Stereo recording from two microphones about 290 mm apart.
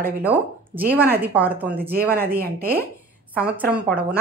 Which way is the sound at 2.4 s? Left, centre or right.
Right.